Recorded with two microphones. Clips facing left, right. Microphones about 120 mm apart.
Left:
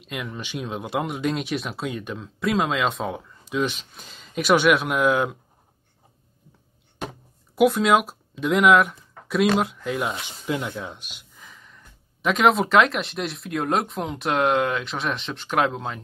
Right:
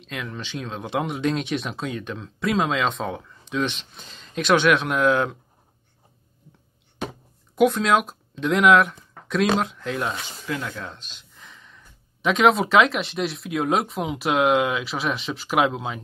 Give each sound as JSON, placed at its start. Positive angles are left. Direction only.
{"t": 0.0, "sound": "speech", "side_deg": 5}
{"t": 7.0, "sound": "a sound", "side_deg": 5}
{"t": 9.6, "sound": "speech", "side_deg": 5}
{"t": 10.2, "sound": "speech", "side_deg": 20}